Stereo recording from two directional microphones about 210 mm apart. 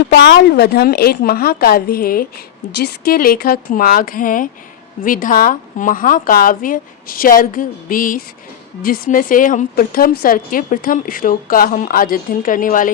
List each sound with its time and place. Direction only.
0.0 s a woman's voice: 50° left (ahead or behind)